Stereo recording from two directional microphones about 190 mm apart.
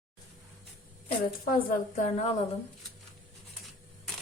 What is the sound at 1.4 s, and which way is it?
Speech, 45° left (ahead or behind).